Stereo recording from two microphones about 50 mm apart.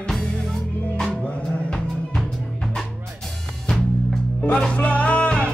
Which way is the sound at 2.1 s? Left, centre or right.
Centre.